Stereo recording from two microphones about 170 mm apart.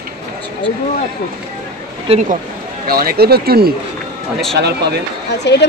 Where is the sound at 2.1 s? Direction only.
35° right (ahead or behind).